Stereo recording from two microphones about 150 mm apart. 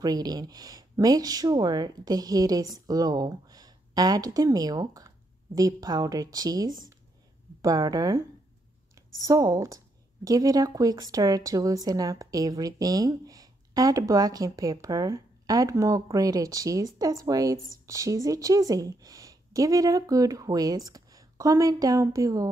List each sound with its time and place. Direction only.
0.0 s a woman's voice: 25° right (ahead or behind)
9.2 s a woman's voice: 20° right (ahead or behind)